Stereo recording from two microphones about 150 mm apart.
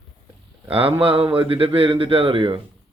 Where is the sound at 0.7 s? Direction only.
40° right (ahead or behind).